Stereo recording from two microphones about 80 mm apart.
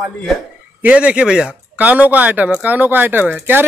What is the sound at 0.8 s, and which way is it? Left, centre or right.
Speech, centre.